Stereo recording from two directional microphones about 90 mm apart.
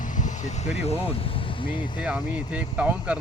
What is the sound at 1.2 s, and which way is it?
Vehicle, 90° left.